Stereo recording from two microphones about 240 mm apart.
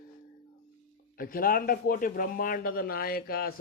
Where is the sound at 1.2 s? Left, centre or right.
Left.